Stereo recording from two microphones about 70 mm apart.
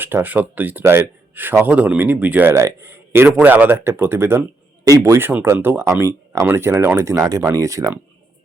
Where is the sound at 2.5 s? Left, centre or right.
Right.